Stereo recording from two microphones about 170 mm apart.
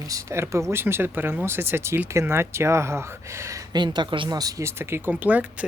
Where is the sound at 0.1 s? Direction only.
20° right (ahead or behind).